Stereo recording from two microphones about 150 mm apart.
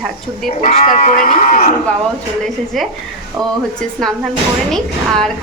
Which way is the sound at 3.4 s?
20° right (ahead or behind).